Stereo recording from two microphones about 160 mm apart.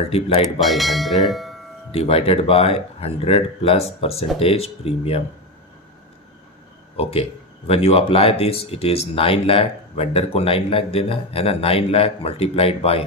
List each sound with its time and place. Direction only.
0.1 s speech: 40° left (ahead or behind)
0.6 s speech: centre (ahead or behind)
1.9 s speech: 35° left (ahead or behind)
7.0 s speech: 35° left (ahead or behind)